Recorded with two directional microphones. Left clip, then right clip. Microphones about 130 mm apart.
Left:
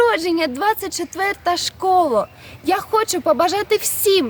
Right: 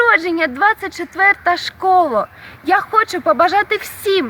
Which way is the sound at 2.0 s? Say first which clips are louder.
Right 1 dB; 10° left (ahead or behind).